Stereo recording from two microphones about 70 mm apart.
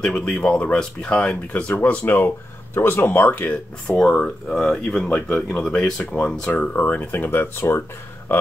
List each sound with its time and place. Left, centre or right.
0.0 s speech: centre
3.9 s speech: centre
6.7 s speech: left